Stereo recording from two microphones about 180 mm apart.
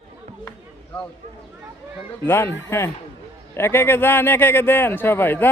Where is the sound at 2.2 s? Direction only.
15° left (ahead or behind).